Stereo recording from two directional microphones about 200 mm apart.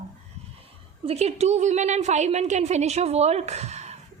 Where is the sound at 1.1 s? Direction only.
30° right (ahead or behind).